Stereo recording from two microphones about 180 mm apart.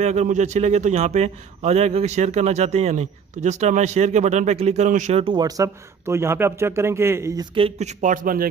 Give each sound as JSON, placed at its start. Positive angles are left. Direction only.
{"t": 0.0, "sound": "a man's voice", "side_deg": -40}
{"t": 5.2, "sound": "speech", "side_deg": -25}
{"t": 7.5, "sound": "speech", "side_deg": -35}